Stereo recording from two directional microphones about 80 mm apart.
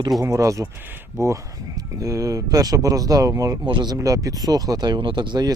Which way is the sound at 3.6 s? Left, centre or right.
Right.